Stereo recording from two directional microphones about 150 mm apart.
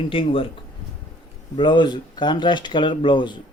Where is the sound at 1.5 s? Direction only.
30° left (ahead or behind).